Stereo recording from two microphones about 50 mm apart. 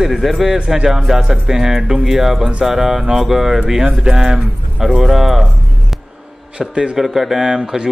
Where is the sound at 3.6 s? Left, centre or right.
Centre.